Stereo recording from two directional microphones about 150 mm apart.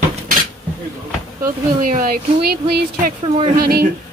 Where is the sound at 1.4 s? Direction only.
65° right (ahead or behind); by 2.5 s 80° right.